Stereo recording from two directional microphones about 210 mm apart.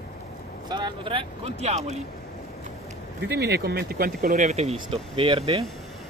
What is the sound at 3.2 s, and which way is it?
Speech, 50° right (ahead or behind).